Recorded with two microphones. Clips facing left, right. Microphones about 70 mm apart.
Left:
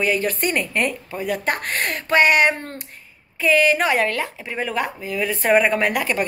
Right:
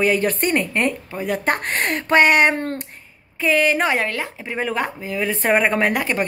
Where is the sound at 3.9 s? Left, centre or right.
Centre.